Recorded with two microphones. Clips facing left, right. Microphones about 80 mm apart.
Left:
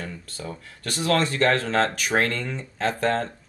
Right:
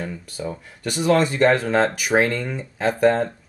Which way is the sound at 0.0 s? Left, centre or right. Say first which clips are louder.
Right 6 dB; centre.